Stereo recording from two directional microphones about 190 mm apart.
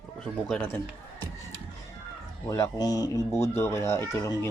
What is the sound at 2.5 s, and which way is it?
Speech, 20° left (ahead or behind).